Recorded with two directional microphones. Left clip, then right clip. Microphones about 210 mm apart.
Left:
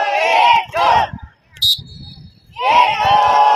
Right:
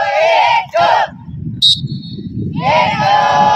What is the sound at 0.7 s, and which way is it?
Crow, 15° right (ahead or behind).